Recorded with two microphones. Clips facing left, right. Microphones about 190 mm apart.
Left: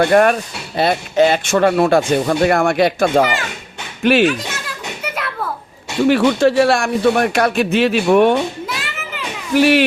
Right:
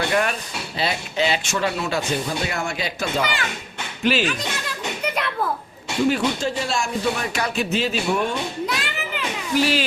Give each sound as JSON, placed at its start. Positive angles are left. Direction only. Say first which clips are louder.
{"t": 0.0, "sound": "speech", "louder": "left 10 dB", "side_deg": 50}
{"t": 5.0, "sound": "a sound", "louder": "even", "side_deg": 5}
{"t": 6.1, "sound": "speech", "louder": "left 11 dB", "side_deg": 70}
{"t": 8.6, "sound": "children playing", "louder": "even", "side_deg": 0}
{"t": 9.6, "sound": "speech", "louder": "left 8 dB", "side_deg": 65}